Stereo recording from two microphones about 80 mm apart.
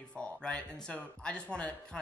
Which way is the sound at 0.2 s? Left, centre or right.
Centre.